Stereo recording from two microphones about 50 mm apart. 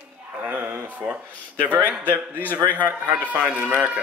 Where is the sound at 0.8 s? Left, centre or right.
Right.